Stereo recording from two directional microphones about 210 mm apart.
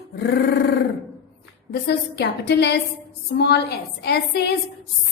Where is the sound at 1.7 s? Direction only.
50° left (ahead or behind).